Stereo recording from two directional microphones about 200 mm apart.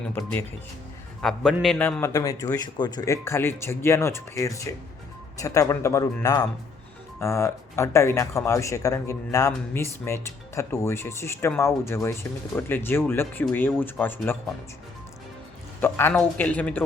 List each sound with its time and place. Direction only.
0.2 s a man's voice: 10° left (ahead or behind)
15.8 s speech: 10° left (ahead or behind)